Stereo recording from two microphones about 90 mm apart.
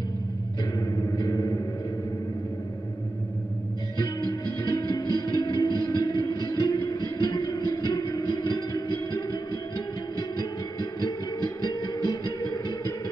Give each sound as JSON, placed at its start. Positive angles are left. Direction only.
{"t": 0.7, "sound": "music", "side_deg": 45}
{"t": 4.0, "sound": "music", "side_deg": 45}
{"t": 10.4, "sound": "music", "side_deg": 50}